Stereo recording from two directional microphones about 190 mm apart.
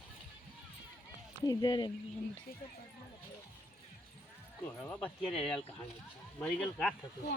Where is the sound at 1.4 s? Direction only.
20° left (ahead or behind).